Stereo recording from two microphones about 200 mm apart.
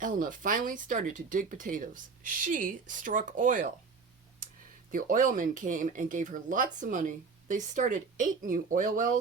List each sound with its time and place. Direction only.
0.0 s speech: 40° right (ahead or behind)
4.9 s speech: 45° right (ahead or behind)